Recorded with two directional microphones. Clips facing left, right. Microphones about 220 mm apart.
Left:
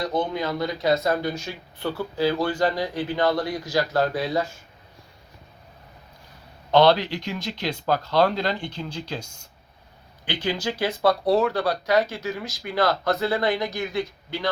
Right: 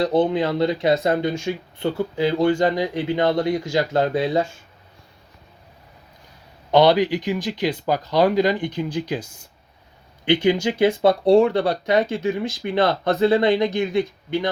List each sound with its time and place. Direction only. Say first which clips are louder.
0.0 s speech: right 7 dB; 30° right (ahead or behind)
6.7 s speech: right 2 dB; 15° right (ahead or behind)
10.2 s speech: right 9 dB; 25° right (ahead or behind)